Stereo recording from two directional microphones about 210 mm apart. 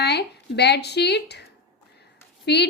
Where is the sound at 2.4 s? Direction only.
50° left (ahead or behind).